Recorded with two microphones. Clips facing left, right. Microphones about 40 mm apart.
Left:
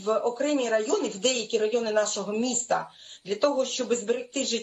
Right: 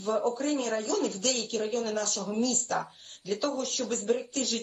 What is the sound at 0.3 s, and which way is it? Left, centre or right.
Speech, left.